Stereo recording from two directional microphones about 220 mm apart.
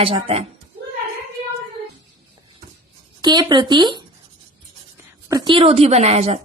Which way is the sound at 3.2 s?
20° right (ahead or behind).